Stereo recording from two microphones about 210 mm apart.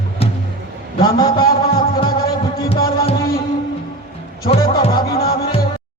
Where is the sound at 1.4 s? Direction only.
45° left (ahead or behind).